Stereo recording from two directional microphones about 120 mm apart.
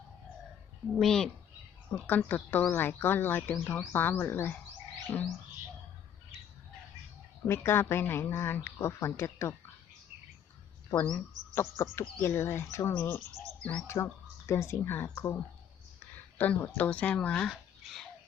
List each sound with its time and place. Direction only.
0.9 s speech: 5° left (ahead or behind)
1.9 s speech: 15° left (ahead or behind)
7.4 s speech: 20° left (ahead or behind)
10.9 s speech: 10° left (ahead or behind)
11.5 s speech: 20° left (ahead or behind)
13.8 s speech: 20° left (ahead or behind)
16.4 s speech: 15° left (ahead or behind)